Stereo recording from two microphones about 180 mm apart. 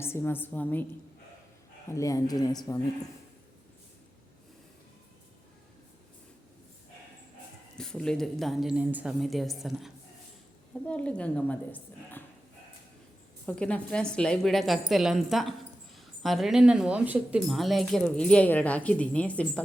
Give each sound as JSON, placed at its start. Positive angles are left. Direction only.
{"t": 0.0, "sound": "a woman's voice", "side_deg": 15}
{"t": 1.9, "sound": "speech", "side_deg": 15}
{"t": 7.8, "sound": "a woman's voice", "side_deg": 5}
{"t": 13.4, "sound": "speech", "side_deg": 5}